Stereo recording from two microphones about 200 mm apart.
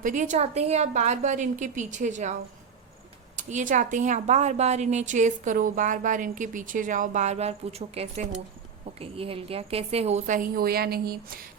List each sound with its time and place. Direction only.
0.0 s a woman's voice: 40° right (ahead or behind)
3.3 s a woman's voice: 40° right (ahead or behind)